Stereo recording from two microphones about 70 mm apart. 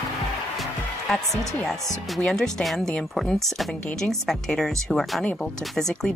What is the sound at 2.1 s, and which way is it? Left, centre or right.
Speech, centre.